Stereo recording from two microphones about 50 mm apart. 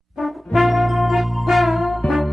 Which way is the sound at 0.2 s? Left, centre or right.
Centre.